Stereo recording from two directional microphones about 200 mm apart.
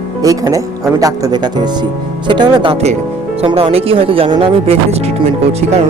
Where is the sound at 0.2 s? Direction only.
20° right (ahead or behind).